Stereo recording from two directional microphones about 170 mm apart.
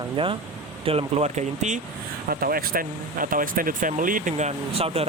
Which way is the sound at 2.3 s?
60° right (ahead or behind).